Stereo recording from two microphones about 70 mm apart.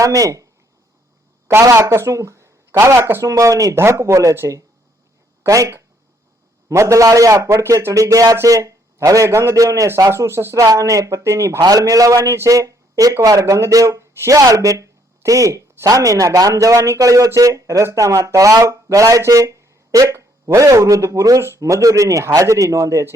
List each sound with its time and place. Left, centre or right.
0.0 s speech: right
1.7 s speech: right
5.5 s speech: right
10.6 s speech: right
11.6 s speech: right
12.5 s speech: right